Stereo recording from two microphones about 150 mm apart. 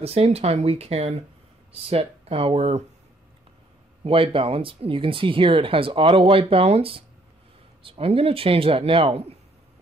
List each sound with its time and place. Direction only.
0.0 s speech: 40° right (ahead or behind)
4.0 s speech: 35° right (ahead or behind)